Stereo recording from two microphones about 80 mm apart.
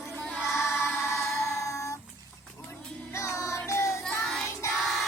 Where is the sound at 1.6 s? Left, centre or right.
Left.